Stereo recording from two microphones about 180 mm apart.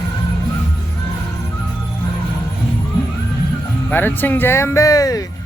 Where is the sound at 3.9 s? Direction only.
10° left (ahead or behind).